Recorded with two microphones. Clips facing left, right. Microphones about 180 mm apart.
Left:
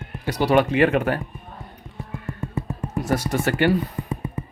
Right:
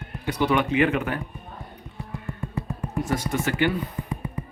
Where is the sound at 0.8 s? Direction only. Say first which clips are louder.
Left 5 dB; 55° left (ahead or behind).